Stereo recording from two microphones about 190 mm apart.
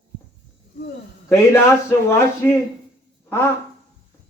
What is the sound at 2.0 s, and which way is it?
Speech, 15° left (ahead or behind).